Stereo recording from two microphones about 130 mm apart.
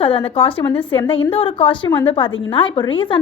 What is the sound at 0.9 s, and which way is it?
A woman's voice, 40° left (ahead or behind).